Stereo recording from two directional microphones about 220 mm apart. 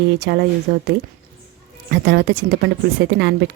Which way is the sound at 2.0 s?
50° right (ahead or behind).